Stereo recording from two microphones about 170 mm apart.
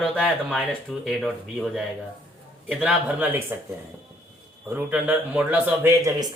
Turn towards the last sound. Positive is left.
turn(degrees=-20)  # may be behind; listen again after turning